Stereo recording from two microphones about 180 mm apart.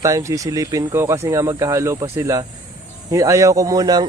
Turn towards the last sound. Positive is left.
turn(degrees=-20)  # may be behind; listen again after turning